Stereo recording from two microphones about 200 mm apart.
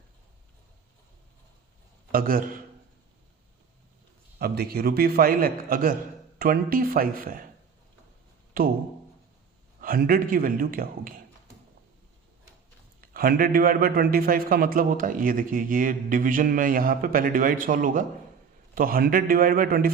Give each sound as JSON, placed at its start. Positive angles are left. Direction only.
{"t": 2.1, "sound": "a man's voice", "side_deg": -45}
{"t": 4.4, "sound": "a man's voice", "side_deg": -50}
{"t": 9.8, "sound": "a man's voice", "side_deg": -45}
{"t": 13.0, "sound": "a man's voice", "side_deg": -50}